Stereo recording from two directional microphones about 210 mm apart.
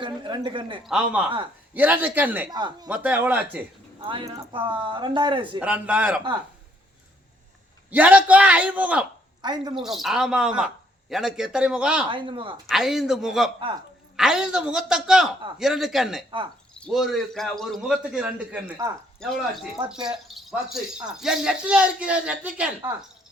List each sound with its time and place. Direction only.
0.0 s a sound: 25° right (ahead or behind)
0.9 s a man's voice: 5° right (ahead or behind)
2.5 s speech: 20° right (ahead or behind)
2.9 s a man's voice: 5° right (ahead or behind)
4.0 s speech: 25° right (ahead or behind)
5.5 s a man's voice: 5° right (ahead or behind)
7.9 s a man's voice: 5° right (ahead or behind)
9.4 s speech: 20° right (ahead or behind)
9.8 s speech: centre (ahead or behind)
12.0 s speech: 25° right (ahead or behind)
12.6 s speech: centre (ahead or behind)
19.9 s speech: 5° right (ahead or behind)